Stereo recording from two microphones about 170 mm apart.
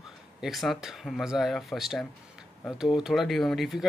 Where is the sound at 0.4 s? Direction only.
Centre (ahead or behind).